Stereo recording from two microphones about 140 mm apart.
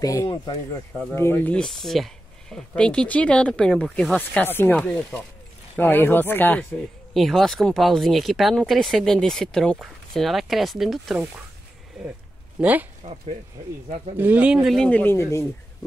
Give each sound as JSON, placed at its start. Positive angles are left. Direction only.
{"t": 0.0, "sound": "speech", "side_deg": 20}
{"t": 5.8, "sound": "speech", "side_deg": 15}
{"t": 7.2, "sound": "speech", "side_deg": 0}
{"t": 12.5, "sound": "speech", "side_deg": -10}
{"t": 13.0, "sound": "speech", "side_deg": -55}
{"t": 14.1, "sound": "speech", "side_deg": -10}